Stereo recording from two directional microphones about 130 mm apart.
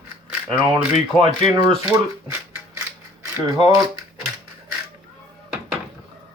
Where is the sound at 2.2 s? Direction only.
15° right (ahead or behind).